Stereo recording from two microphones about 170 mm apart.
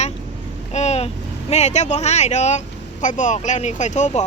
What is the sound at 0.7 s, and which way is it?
Speech, 40° left (ahead or behind).